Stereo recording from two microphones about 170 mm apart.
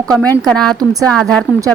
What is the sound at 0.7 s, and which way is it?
Speech, 20° right (ahead or behind).